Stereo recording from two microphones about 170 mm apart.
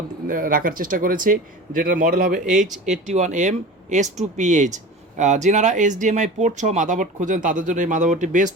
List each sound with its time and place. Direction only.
0.3 s speech: 55° right (ahead or behind)